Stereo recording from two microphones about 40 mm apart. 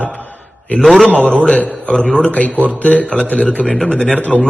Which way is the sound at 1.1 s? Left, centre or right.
Right.